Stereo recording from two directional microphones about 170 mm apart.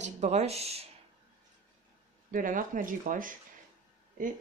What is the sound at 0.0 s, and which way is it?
Speech, 40° right (ahead or behind).